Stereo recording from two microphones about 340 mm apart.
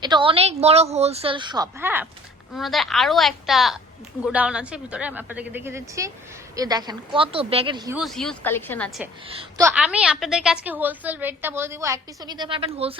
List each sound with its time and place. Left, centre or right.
0.0 s a woman's voice: centre
9.3 s a woman's voice: centre